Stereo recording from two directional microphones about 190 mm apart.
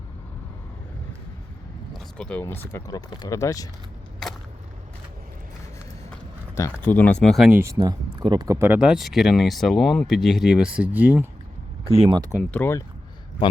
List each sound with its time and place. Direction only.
1.9 s vehicle: 5° left (ahead or behind)
2.4 s speech: 10° left (ahead or behind)
6.6 s speech: 10° left (ahead or behind)
7.6 s speech: 20° right (ahead or behind)
11.9 s speech: 30° right (ahead or behind)
12.3 s speech: 5° left (ahead or behind)